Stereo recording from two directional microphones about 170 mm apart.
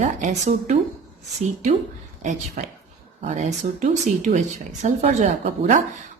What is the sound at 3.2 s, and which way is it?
Speech, 45° right (ahead or behind).